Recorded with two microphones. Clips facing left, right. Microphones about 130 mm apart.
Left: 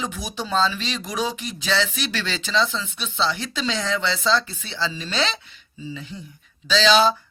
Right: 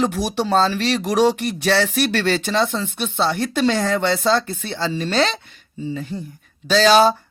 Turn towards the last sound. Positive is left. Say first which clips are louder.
# right 4 dB
turn(degrees=-50)  # may be behind; listen again after turning